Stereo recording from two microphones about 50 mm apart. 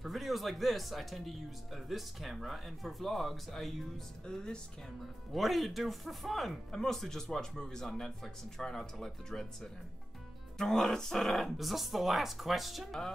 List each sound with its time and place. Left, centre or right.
0.0 s speech: centre
4.3 s speech: centre
5.3 s speech: centre